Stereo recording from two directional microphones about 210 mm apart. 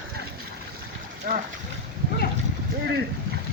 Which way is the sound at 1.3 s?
40° right (ahead or behind).